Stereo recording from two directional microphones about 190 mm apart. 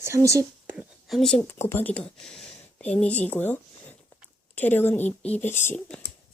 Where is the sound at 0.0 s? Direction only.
15° right (ahead or behind).